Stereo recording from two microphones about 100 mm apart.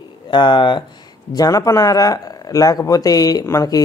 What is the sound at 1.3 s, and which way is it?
Speech, 35° left (ahead or behind).